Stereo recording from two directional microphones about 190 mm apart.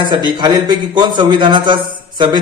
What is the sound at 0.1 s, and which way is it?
A man's voice, 20° right (ahead or behind).